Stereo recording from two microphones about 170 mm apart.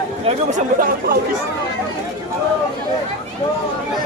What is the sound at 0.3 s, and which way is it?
Speech, 50° right (ahead or behind).